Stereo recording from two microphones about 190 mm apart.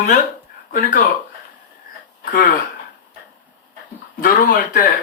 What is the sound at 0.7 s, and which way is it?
Speech, 45° left (ahead or behind).